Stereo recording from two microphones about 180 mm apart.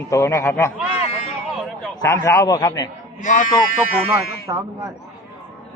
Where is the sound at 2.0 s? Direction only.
15° left (ahead or behind).